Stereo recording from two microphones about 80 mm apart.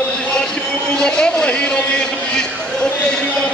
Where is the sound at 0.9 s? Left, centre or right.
Centre.